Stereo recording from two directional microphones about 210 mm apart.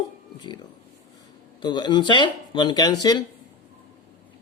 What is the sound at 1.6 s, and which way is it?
Speech, 20° left (ahead or behind).